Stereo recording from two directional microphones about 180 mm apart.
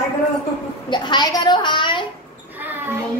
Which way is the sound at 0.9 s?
25° left (ahead or behind).